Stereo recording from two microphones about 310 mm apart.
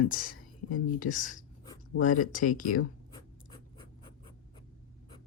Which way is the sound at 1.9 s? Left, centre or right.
Left.